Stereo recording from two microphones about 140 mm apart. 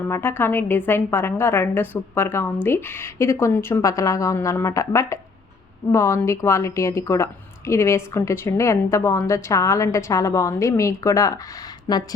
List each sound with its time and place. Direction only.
0.1 s a woman's voice: 15° left (ahead or behind)